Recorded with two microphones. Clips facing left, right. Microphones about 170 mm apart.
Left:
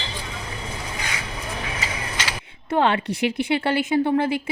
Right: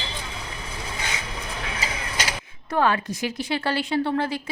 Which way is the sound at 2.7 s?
25° left (ahead or behind).